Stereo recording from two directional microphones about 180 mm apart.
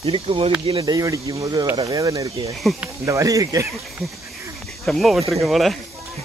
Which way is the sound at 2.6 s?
Centre (ahead or behind).